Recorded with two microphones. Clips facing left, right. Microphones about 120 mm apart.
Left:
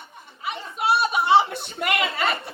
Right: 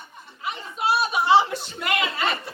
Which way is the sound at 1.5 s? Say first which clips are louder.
Left 1 dB; 60° left (ahead or behind).